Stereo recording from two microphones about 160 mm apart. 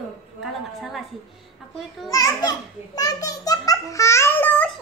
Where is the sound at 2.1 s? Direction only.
20° left (ahead or behind).